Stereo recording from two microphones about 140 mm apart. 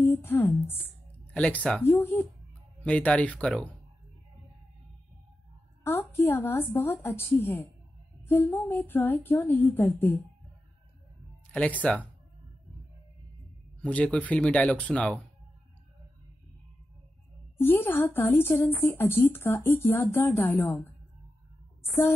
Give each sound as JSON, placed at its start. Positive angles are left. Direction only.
{"t": 0.0, "sound": "a woman's voice", "side_deg": 15}
{"t": 5.9, "sound": "a woman's voice", "side_deg": 15}
{"t": 11.5, "sound": "a woman's voice", "side_deg": 10}
{"t": 13.7, "sound": "a woman's voice", "side_deg": 10}
{"t": 17.6, "sound": "a woman's voice", "side_deg": 15}